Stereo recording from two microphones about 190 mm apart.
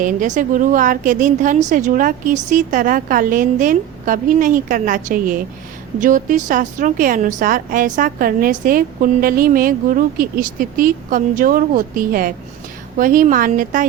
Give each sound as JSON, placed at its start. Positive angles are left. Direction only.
{"t": 0.0, "sound": "a woman's voice", "side_deg": -40}